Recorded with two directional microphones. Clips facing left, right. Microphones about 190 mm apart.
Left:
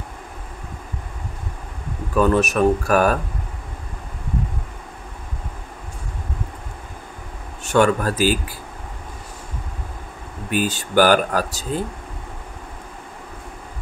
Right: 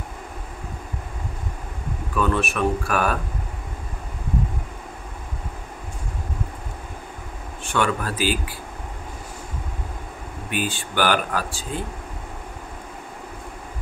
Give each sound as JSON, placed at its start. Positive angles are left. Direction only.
{"t": 2.1, "sound": "speech", "side_deg": 40}
{"t": 7.6, "sound": "speech", "side_deg": 45}
{"t": 10.5, "sound": "speech", "side_deg": 40}